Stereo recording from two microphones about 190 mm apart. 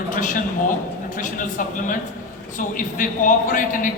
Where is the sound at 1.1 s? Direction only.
45° left (ahead or behind).